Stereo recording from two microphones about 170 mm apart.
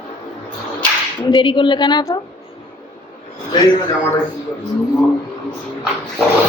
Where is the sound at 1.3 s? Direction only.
25° left (ahead or behind).